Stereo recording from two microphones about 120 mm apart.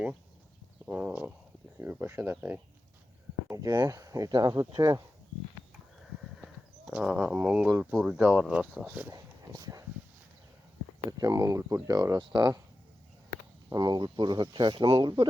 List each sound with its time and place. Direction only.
0.9 s speech: 10° right (ahead or behind)
3.5 s speech: 30° right (ahead or behind)
6.8 s speech: 10° right (ahead or behind)
9.0 s speech: 30° right (ahead or behind)
11.2 s speech: 30° right (ahead or behind)
13.7 s speech: 35° right (ahead or behind)